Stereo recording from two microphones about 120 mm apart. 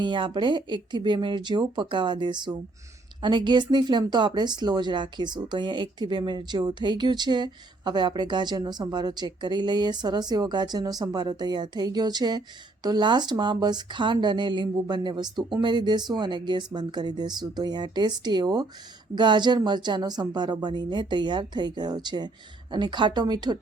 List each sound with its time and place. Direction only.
0.0 s speech: 40° right (ahead or behind)